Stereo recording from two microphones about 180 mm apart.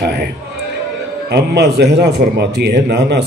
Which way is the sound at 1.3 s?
65° right (ahead or behind).